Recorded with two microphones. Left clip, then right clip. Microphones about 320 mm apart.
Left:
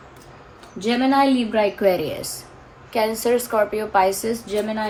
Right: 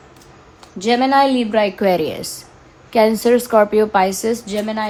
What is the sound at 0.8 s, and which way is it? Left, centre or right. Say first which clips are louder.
A woman's voice: right 5 dB; right.